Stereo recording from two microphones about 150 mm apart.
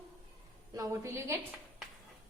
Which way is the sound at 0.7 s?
20° right (ahead or behind).